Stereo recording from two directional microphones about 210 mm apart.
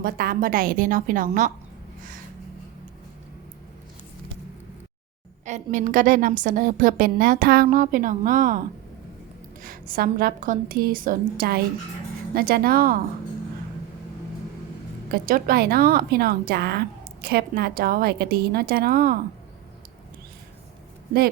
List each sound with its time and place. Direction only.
0.0 s a woman's voice: 45° right (ahead or behind)
5.5 s a woman's voice: 35° right (ahead or behind)
15.1 s a woman's voice: 45° right (ahead or behind)